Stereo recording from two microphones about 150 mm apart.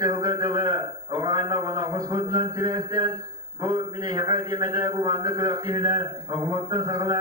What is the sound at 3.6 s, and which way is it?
A man's voice, 30° right (ahead or behind).